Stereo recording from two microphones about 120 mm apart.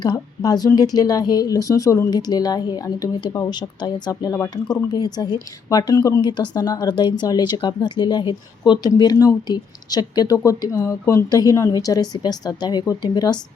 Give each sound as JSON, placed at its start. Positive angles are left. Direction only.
{"t": 0.0, "sound": "speech", "side_deg": 35}
{"t": 6.2, "sound": "speech", "side_deg": 40}